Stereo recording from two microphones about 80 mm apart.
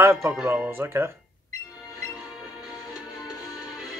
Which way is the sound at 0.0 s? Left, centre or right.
Right.